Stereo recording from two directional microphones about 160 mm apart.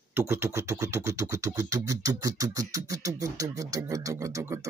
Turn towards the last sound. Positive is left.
turn(degrees=-20)  # may be behind; listen again after turning